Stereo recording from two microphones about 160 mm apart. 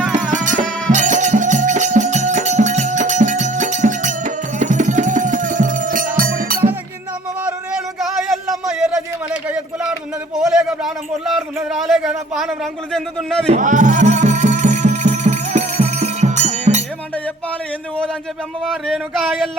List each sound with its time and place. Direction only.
0.1 s music: 50° right (ahead or behind)
7.4 s a sound: 5° right (ahead or behind)
13.5 s music: 50° right (ahead or behind)
18.6 s speech: centre (ahead or behind)